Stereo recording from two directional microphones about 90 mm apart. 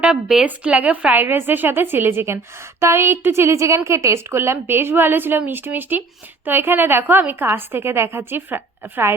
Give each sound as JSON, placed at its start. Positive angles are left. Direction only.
{"t": 0.0, "sound": "a woman's voice", "side_deg": -10}